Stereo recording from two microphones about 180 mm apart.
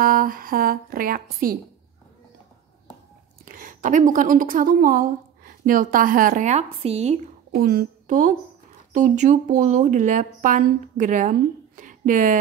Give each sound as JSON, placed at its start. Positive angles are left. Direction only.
{"t": 0.0, "sound": "speech", "side_deg": -50}
{"t": 3.4, "sound": "a woman's voice", "side_deg": -50}
{"t": 7.6, "sound": "a woman's voice", "side_deg": -55}